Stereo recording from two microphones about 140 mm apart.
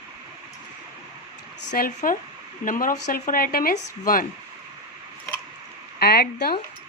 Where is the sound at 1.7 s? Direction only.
85° left.